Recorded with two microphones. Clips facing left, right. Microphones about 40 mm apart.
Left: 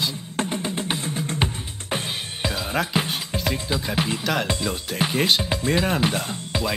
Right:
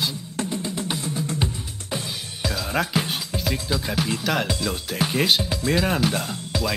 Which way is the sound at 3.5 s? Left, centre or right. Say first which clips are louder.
Even; left.